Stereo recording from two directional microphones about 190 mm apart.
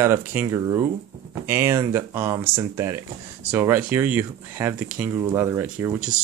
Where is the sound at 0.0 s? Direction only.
10° right (ahead or behind).